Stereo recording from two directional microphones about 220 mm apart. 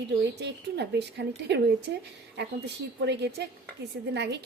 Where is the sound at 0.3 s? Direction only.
50° right (ahead or behind).